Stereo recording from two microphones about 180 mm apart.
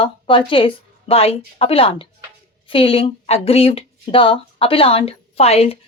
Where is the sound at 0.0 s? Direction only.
30° left (ahead or behind).